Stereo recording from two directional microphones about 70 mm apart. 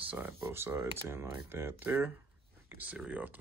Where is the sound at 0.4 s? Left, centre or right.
Right.